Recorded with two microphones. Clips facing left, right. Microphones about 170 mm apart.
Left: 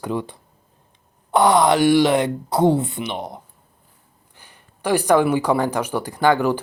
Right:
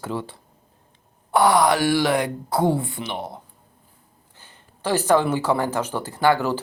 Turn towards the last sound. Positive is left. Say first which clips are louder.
# left 2 dB
turn(degrees=15)  # may be behind; listen again after turning